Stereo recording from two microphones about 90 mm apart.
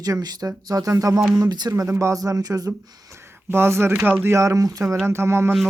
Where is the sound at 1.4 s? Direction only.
50° right (ahead or behind).